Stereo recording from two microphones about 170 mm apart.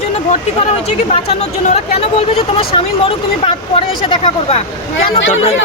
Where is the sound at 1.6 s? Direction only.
40° left (ahead or behind).